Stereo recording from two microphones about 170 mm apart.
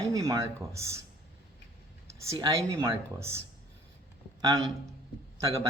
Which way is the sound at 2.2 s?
25° right (ahead or behind).